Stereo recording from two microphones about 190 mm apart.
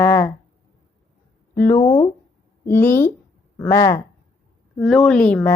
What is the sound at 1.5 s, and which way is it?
Speech, 15° left (ahead or behind).